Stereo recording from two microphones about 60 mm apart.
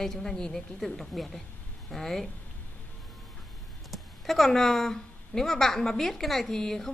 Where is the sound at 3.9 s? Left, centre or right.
Centre.